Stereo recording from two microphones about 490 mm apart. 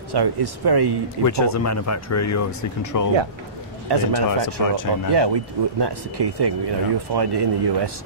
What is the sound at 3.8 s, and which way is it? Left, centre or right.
Speech, right.